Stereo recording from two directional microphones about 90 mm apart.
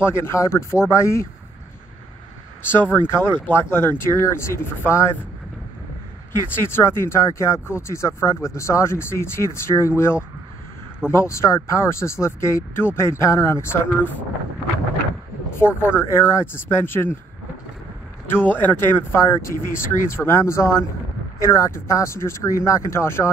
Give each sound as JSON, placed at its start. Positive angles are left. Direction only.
{"t": 0.0, "sound": "speech", "side_deg": 25}
{"t": 2.7, "sound": "speech", "side_deg": 20}
{"t": 6.5, "sound": "speech", "side_deg": 25}
{"t": 15.5, "sound": "speech", "side_deg": 25}
{"t": 18.2, "sound": "speech", "side_deg": 25}